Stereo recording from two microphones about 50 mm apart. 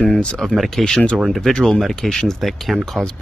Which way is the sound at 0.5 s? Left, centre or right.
Centre.